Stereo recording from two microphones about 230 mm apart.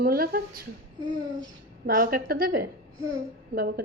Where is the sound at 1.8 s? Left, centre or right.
Right.